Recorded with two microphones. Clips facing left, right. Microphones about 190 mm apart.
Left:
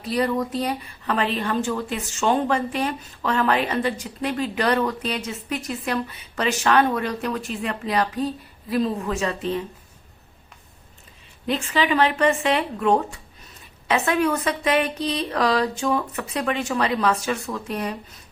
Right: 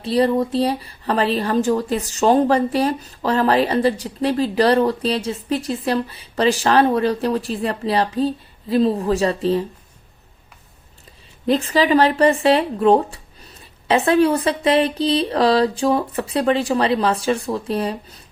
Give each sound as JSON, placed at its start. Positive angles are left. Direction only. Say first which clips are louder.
{"t": 0.0, "sound": "speech", "louder": "right 6 dB", "side_deg": -30}
{"t": 11.4, "sound": "speech", "louder": "right 6 dB", "side_deg": -35}